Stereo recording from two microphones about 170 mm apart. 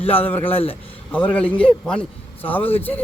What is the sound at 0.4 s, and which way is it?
Speech, 35° left (ahead or behind).